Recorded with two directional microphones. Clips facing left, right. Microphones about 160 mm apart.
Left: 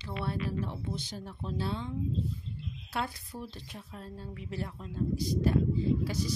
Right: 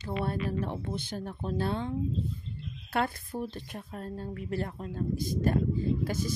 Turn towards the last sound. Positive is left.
turn(degrees=-50)  # may be behind; listen again after turning